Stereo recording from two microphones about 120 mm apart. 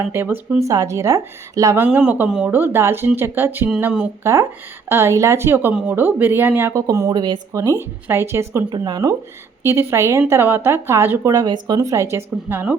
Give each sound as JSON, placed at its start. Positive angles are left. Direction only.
{"t": 0.0, "sound": "speech", "side_deg": -20}
{"t": 1.8, "sound": "speech", "side_deg": -10}
{"t": 4.2, "sound": "speech", "side_deg": -25}
{"t": 6.8, "sound": "speech", "side_deg": -30}
{"t": 8.7, "sound": "speech", "side_deg": -35}
{"t": 11.3, "sound": "speech", "side_deg": -35}